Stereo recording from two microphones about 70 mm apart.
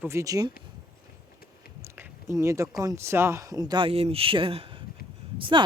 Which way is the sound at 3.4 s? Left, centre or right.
Right.